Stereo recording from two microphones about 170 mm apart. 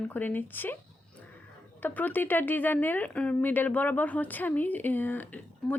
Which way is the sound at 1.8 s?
10° left (ahead or behind).